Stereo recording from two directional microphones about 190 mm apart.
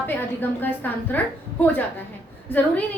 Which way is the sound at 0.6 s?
10° left (ahead or behind).